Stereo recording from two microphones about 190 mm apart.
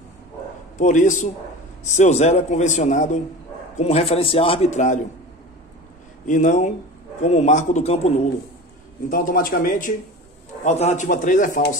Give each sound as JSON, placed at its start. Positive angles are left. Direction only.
{"t": 0.7, "sound": "a man's voice", "side_deg": 40}
{"t": 6.2, "sound": "a man's voice", "side_deg": 40}
{"t": 9.1, "sound": "speech", "side_deg": 45}
{"t": 10.6, "sound": "a man's voice", "side_deg": 35}